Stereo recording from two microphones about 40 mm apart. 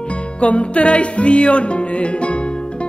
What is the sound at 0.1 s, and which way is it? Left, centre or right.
Music, left.